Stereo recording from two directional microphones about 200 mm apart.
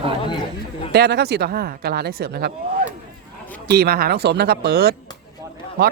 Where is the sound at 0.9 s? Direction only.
55° right (ahead or behind).